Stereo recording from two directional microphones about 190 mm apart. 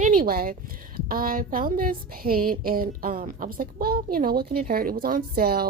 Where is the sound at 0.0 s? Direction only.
50° right (ahead or behind).